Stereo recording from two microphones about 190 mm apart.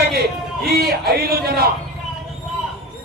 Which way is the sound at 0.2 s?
55° right (ahead or behind).